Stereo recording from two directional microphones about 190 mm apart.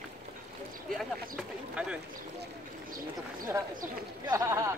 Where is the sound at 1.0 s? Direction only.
Centre (ahead or behind).